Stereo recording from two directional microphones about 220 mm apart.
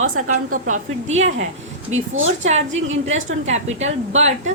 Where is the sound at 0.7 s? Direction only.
30° right (ahead or behind).